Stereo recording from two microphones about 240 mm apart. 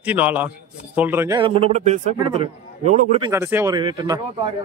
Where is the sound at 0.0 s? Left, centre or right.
Centre.